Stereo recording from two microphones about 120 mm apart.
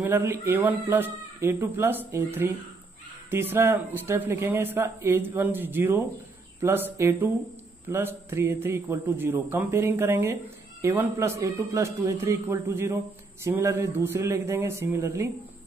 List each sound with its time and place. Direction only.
0.0 s a man's voice: 20° right (ahead or behind)